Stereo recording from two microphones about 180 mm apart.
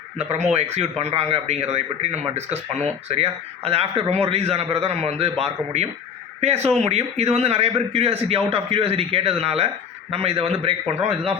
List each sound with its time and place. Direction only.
0.3 s a man's voice: 40° right (ahead or behind)